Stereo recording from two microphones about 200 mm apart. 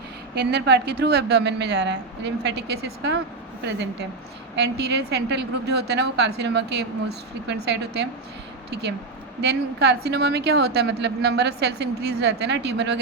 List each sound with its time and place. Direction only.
0.3 s a woman's voice: 55° right (ahead or behind)
4.5 s a woman's voice: 55° right (ahead or behind)